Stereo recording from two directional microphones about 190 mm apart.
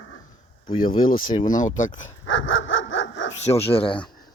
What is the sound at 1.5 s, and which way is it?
Speech, 45° left (ahead or behind).